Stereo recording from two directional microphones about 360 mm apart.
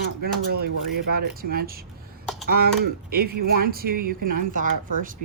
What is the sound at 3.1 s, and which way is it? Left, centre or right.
Speech, right.